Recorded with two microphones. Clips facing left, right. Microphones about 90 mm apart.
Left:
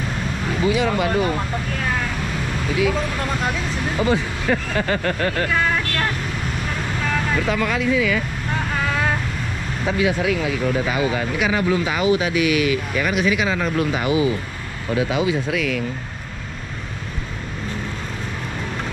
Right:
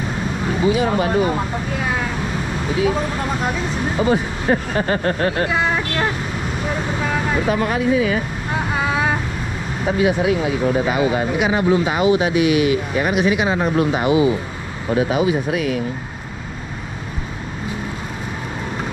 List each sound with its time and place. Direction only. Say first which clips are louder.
0.7 s speech: right 2 dB; 25° right (ahead or behind)
1.2 s speech: right 2 dB; 10° right (ahead or behind)
2.7 s speech: right 2 dB; 30° right (ahead or behind)
3.2 s speech: right 2 dB; 5° right (ahead or behind)
4.1 s speech: right 3 dB; 30° right (ahead or behind)
6.7 s vehicle: right 3 dB; 15° right (ahead or behind)
8.5 s vehicle: right 3 dB; 15° right (ahead or behind)
9.8 s speech: right 3 dB; 30° right (ahead or behind)